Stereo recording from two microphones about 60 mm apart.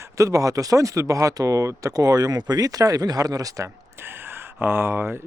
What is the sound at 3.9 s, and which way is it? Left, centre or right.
Speech, right.